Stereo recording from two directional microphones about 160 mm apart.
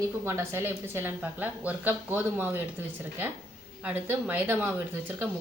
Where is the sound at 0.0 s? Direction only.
15° right (ahead or behind).